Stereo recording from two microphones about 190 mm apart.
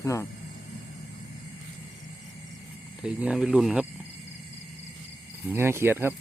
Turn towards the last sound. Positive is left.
turn(degrees=-10)  # may be behind; listen again after turning